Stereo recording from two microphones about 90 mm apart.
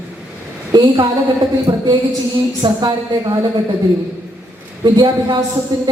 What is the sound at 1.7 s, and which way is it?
Speech, 55° right (ahead or behind).